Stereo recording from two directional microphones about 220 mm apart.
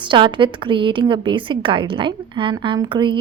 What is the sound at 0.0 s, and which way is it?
A woman's voice, 20° right (ahead or behind).